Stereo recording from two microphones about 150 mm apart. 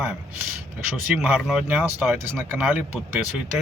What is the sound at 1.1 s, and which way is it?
Speech, 5° right (ahead or behind).